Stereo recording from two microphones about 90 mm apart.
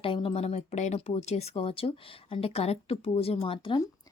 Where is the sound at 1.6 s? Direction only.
90° left.